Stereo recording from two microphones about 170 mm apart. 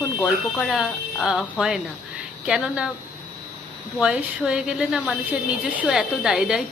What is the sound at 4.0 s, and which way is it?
Speech, 5° right (ahead or behind).